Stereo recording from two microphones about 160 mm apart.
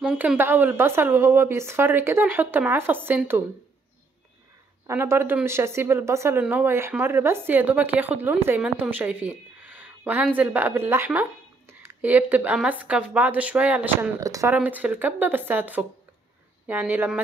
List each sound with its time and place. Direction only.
0.0 s a woman's voice: 5° right (ahead or behind)
4.8 s speech: 15° right (ahead or behind)
14.2 s speech: 20° right (ahead or behind)